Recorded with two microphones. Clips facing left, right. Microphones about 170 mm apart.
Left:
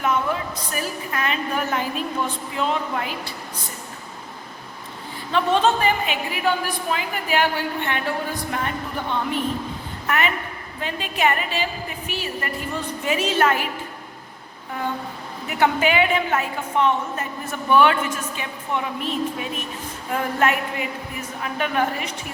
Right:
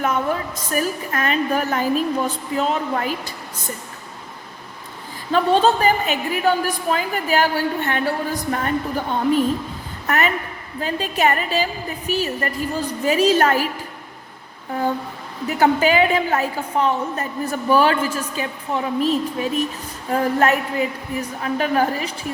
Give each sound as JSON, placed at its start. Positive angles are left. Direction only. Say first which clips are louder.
{"t": 0.5, "sound": "a woman's voice", "louder": "right 5 dB", "side_deg": -45}
{"t": 5.3, "sound": "a woman's voice", "louder": "right 3 dB", "side_deg": -35}
{"t": 15.4, "sound": "a woman's voice", "louder": "right 3 dB", "side_deg": -35}